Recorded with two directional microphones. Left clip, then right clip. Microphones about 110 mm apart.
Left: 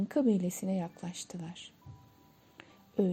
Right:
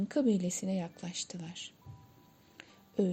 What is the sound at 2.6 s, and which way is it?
Music, 40° left (ahead or behind).